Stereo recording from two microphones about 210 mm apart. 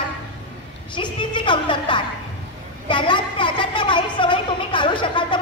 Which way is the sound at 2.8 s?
20° left (ahead or behind).